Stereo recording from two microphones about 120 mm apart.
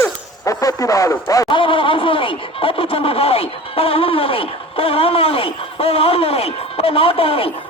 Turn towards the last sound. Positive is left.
turn(degrees=50)  # may be behind; listen again after turning